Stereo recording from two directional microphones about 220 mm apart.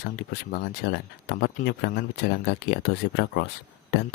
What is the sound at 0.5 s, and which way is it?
Speech, 50° left (ahead or behind).